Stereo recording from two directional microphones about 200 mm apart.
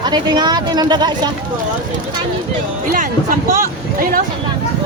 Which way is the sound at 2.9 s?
45° right (ahead or behind).